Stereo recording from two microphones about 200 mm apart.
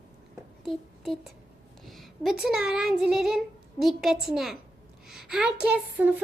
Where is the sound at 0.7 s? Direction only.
Centre (ahead or behind).